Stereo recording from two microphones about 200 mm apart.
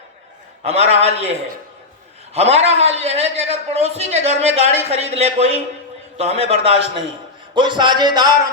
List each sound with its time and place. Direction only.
0.6 s a man's voice: 30° right (ahead or behind)